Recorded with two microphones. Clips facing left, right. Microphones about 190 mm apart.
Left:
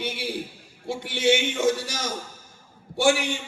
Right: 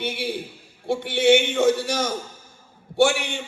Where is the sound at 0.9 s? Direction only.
60° right (ahead or behind).